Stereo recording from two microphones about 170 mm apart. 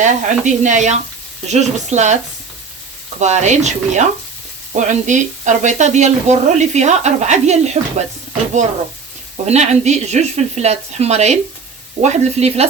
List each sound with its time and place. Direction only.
0.0 s speech: 45° right (ahead or behind)
3.2 s speech: 45° right (ahead or behind)
9.5 s speech: 40° right (ahead or behind)